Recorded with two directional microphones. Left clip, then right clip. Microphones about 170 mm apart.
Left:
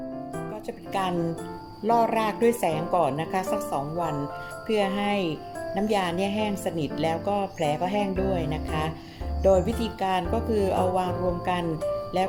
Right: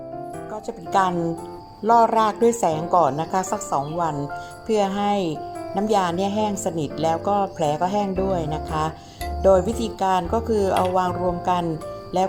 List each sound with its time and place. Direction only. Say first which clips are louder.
1.8 s a woman's voice: right 6 dB; 15° right (ahead or behind)